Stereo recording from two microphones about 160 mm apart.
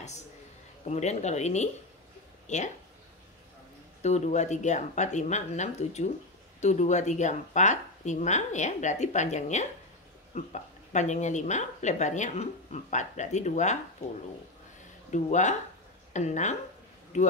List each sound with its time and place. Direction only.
0.8 s speech: 45° left (ahead or behind)
4.0 s speech: 45° left (ahead or behind)
15.0 s speech: 50° left (ahead or behind)